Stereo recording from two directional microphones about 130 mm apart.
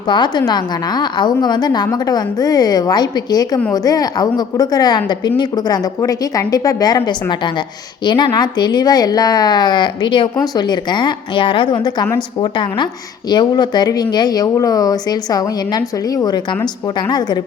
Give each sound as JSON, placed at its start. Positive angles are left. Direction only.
{"t": 0.1, "sound": "a woman's voice", "side_deg": 35}